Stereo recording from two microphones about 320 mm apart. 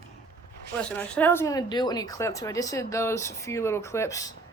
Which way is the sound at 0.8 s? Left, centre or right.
Centre.